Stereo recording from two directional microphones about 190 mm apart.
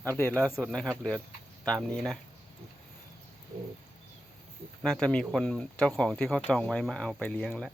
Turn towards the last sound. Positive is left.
turn(degrees=5)  # may be behind; listen again after turning